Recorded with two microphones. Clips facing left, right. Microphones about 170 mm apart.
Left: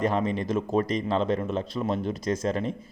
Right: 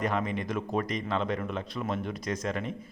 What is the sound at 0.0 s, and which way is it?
A man's voice, 30° left (ahead or behind).